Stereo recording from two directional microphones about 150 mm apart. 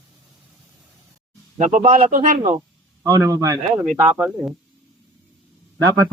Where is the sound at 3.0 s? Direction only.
25° right (ahead or behind).